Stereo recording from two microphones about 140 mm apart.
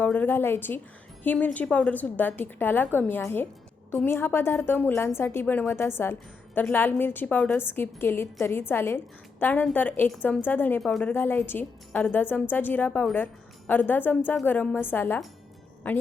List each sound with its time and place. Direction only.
0.0 s a woman's voice: 10° left (ahead or behind)